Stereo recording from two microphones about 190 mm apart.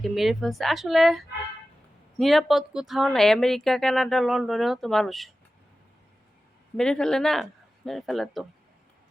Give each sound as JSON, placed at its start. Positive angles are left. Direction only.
{"t": 0.0, "sound": "a woman's voice", "side_deg": 0}
{"t": 6.7, "sound": "a woman's voice", "side_deg": 5}